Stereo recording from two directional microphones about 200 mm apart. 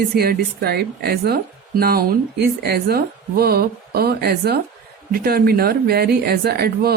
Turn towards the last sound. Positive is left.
turn(degrees=-50)  # may be behind; listen again after turning